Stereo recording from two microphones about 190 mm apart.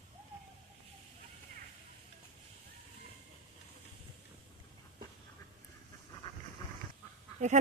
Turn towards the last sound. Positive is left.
turn(degrees=-40)  # may be behind; listen again after turning